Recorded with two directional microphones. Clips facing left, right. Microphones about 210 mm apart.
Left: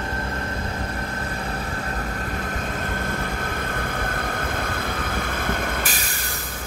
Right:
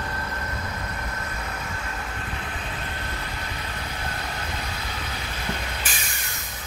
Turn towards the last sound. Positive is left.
turn(degrees=50)  # may be behind; listen again after turning